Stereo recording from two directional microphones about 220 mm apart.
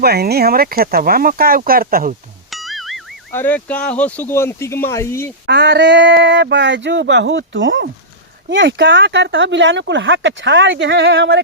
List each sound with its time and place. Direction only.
0.0 s speech: 45° right (ahead or behind)
2.5 s music: centre (ahead or behind)
3.3 s speech: 10° left (ahead or behind)
5.5 s speech: 50° right (ahead or behind)